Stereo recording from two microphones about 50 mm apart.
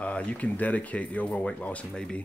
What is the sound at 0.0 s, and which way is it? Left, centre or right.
Speech, left.